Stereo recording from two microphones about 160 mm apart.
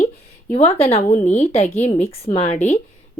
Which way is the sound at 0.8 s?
40° left (ahead or behind).